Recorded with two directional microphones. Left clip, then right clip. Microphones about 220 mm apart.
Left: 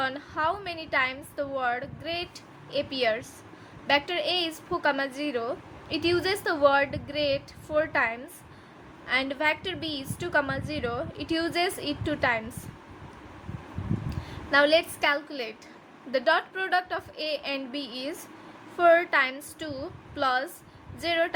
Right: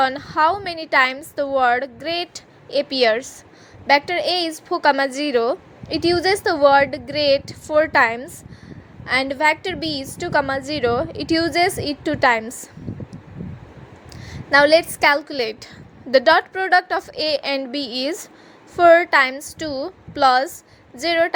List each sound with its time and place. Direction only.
0.0 s a woman's voice: 35° right (ahead or behind)
14.1 s a woman's voice: 30° right (ahead or behind)